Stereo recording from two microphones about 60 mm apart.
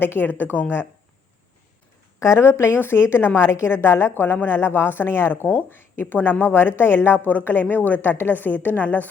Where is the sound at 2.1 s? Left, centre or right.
Left.